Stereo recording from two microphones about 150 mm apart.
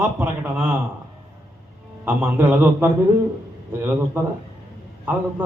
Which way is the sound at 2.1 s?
15° right (ahead or behind).